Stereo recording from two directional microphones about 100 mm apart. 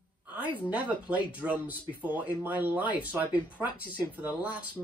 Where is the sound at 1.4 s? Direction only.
10° right (ahead or behind).